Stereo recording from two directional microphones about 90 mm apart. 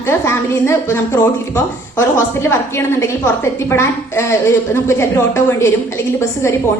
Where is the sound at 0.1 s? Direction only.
30° left (ahead or behind).